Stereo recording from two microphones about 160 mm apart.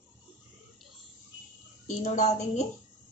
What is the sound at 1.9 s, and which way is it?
Speech, 50° left (ahead or behind).